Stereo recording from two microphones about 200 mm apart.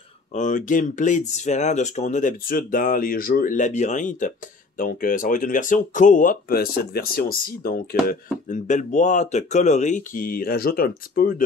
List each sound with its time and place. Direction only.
0.3 s speech: 40° left (ahead or behind)